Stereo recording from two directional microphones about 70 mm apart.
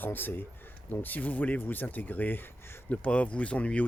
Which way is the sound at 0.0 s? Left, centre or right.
Left.